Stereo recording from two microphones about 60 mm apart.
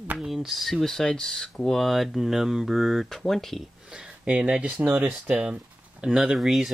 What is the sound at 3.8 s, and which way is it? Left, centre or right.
Speech, centre.